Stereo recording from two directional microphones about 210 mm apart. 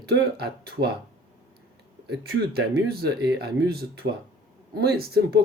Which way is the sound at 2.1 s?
50° right (ahead or behind).